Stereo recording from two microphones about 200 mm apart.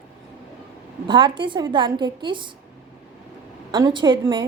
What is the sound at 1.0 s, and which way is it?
A woman's voice, 25° right (ahead or behind).